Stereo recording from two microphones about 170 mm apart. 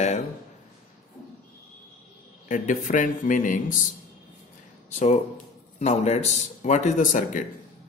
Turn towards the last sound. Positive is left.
turn(degrees=50)  # may be behind; listen again after turning